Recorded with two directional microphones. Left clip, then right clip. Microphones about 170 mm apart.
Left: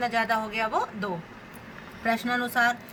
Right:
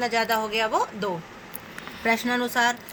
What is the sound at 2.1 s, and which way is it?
Speech, 55° right (ahead or behind).